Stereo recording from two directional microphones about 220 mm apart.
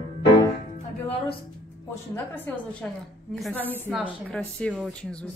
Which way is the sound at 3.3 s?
Centre (ahead or behind).